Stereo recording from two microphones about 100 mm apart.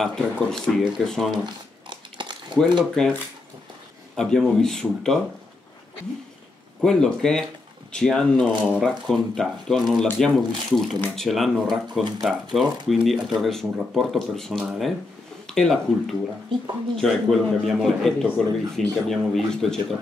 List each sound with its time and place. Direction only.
0.0 s a man's voice: 5° left (ahead or behind)
1.4 s crumpling: 50° right (ahead or behind)
4.2 s a man's voice: 5° left (ahead or behind)
6.8 s a man's voice: 5° left (ahead or behind)